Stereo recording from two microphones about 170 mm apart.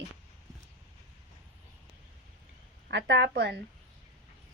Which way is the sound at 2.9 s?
90° right.